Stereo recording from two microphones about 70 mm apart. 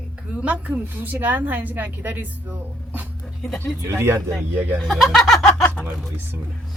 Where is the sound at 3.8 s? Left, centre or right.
Right.